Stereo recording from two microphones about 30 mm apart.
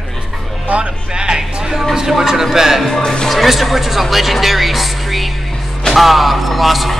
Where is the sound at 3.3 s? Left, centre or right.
Centre.